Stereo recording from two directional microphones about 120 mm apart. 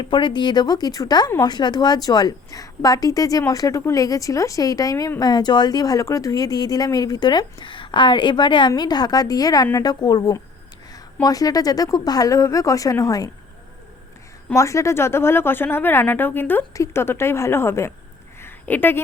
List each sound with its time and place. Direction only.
0.0 s a woman's voice: 40° left (ahead or behind)
14.5 s a woman's voice: 25° left (ahead or behind)
18.3 s a sound: 15° left (ahead or behind)